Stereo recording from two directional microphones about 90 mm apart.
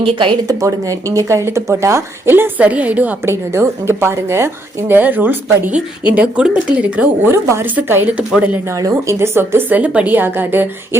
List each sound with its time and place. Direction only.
0.0 s speech: 75° right (ahead or behind)
0.4 s speech: 40° right (ahead or behind); by 3.2 s 15° right (ahead or behind)
3.2 s a woman's voice: 30° right (ahead or behind); by 7.3 s 15° right (ahead or behind)
7.3 s a woman's voice: 30° right (ahead or behind)
8.7 s speech: 35° right (ahead or behind)